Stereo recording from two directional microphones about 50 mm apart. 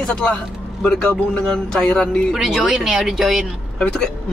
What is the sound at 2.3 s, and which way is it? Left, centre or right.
Speech, centre.